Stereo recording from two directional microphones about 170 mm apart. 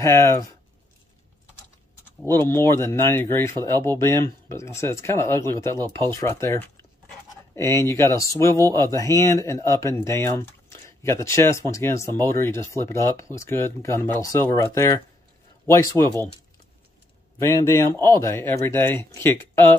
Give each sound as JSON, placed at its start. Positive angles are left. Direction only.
{"t": 0.0, "sound": "speech", "side_deg": 15}
{"t": 2.4, "sound": "speech", "side_deg": 15}
{"t": 17.4, "sound": "speech", "side_deg": 15}